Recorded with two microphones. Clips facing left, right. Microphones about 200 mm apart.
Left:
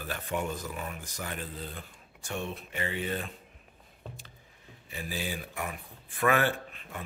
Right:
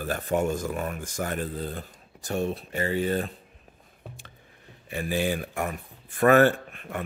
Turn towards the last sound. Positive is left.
turn(degrees=-50)  # may be behind; listen again after turning